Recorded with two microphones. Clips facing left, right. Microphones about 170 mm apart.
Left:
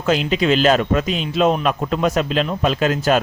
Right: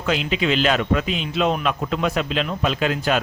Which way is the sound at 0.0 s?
40° left (ahead or behind).